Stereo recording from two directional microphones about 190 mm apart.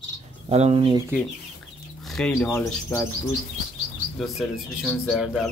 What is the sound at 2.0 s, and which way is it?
Bird, 5° left (ahead or behind).